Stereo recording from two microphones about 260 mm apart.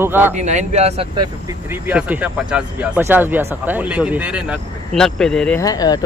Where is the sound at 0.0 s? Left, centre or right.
Centre.